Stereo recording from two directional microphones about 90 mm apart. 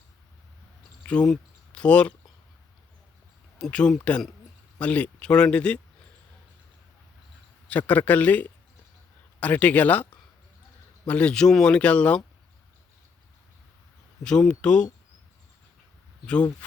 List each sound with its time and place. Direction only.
1.0 s speech: 10° left (ahead or behind)
3.6 s speech: 10° left (ahead or behind)
7.7 s speech: 15° left (ahead or behind)
14.3 s speech: 10° left (ahead or behind)